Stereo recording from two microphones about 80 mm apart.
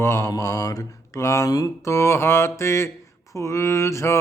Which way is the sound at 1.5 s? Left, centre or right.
Left.